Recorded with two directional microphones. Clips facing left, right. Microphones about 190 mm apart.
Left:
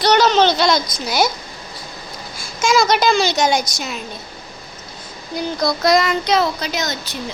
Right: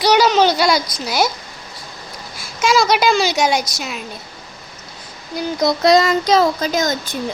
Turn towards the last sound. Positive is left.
turn(degrees=-50)  # may be behind; listen again after turning